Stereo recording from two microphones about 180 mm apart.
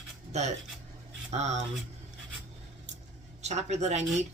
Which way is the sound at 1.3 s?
40° right (ahead or behind).